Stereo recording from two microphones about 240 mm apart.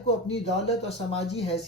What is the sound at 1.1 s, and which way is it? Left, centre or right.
Speech, left.